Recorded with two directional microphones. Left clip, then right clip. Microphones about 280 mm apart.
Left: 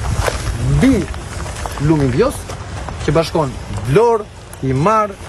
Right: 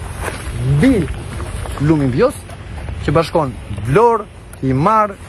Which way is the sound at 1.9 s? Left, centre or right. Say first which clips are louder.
Right 1 dB; centre.